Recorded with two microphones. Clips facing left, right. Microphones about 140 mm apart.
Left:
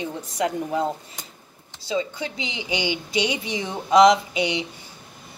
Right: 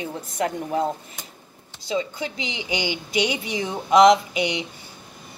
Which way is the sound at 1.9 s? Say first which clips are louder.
Even; 30° left (ahead or behind).